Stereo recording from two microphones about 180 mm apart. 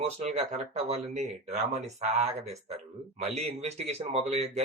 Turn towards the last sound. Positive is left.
turn(degrees=-35)  # may be behind; listen again after turning